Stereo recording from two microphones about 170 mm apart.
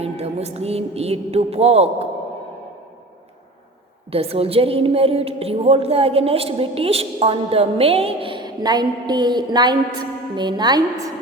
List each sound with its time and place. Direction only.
0.0 s a woman's voice: 35° right (ahead or behind)
4.1 s a woman's voice: 35° right (ahead or behind)